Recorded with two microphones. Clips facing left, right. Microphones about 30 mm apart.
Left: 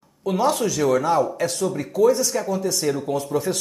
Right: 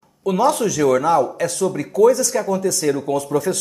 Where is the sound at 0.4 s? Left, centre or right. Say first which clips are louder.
Right 3 dB; right.